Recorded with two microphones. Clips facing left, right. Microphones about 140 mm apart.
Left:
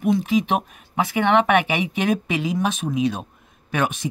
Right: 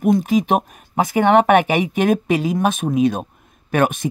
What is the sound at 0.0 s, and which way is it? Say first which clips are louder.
Speech: right 3 dB; 45° right (ahead or behind).